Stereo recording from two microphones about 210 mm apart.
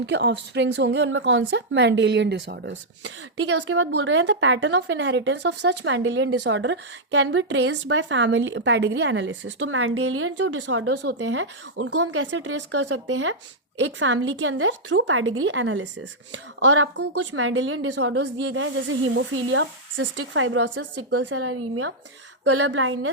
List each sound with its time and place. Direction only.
0.0 s a woman's voice: 55° right (ahead or behind)
11.2 s a woman's voice: 65° right (ahead or behind)